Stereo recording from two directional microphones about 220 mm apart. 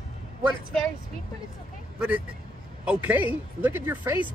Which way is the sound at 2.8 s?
5° right (ahead or behind).